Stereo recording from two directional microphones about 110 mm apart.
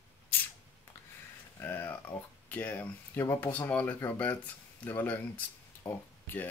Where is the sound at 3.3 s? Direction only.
15° left (ahead or behind).